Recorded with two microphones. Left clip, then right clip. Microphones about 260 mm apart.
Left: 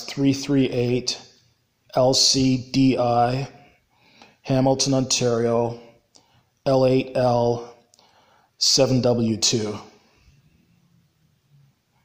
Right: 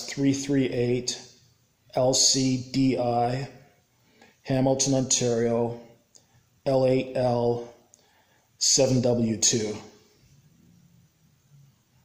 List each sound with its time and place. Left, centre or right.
0.0 s mantra: centre
4.2 s speech: centre
8.5 s mantra: centre